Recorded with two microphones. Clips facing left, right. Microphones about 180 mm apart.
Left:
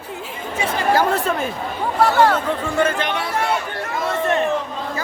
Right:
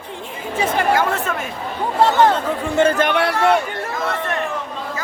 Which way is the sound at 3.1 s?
70° right (ahead or behind).